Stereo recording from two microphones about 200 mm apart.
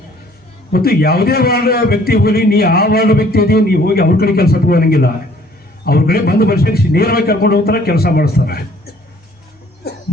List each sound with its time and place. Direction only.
0.7 s a man's voice: 50° left (ahead or behind)